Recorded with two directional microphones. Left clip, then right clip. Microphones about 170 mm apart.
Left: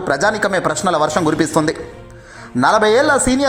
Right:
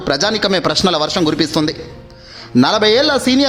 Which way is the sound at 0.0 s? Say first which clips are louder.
Even; 25° right (ahead or behind).